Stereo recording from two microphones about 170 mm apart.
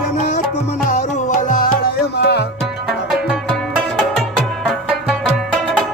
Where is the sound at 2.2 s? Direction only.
80° left.